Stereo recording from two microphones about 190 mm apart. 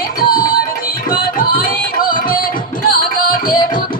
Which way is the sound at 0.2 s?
50° left (ahead or behind).